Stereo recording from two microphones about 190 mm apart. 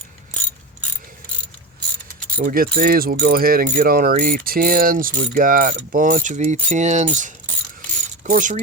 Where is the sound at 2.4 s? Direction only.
50° right (ahead or behind).